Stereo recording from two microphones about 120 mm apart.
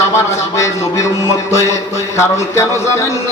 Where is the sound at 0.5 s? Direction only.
25° left (ahead or behind).